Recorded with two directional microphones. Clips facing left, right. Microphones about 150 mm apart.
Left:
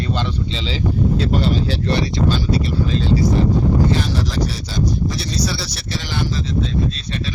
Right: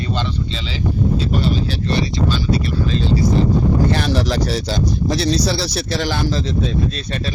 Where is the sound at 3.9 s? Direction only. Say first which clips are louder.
Right 2 dB; 70° right (ahead or behind); by 6.4 s 90° right.